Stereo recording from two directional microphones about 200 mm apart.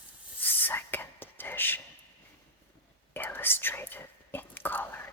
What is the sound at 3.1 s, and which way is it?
Whispering, 10° left (ahead or behind).